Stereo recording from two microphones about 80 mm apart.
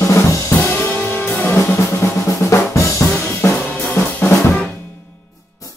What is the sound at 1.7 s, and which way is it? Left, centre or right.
Drum, left.